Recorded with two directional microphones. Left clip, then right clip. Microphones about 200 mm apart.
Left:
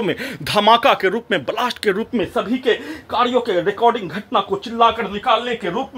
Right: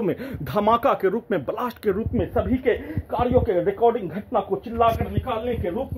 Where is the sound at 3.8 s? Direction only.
30° left (ahead or behind).